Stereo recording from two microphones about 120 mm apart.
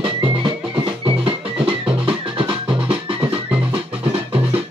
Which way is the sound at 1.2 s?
50° right (ahead or behind).